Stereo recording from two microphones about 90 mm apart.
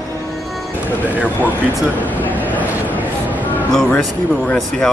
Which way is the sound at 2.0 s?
20° left (ahead or behind).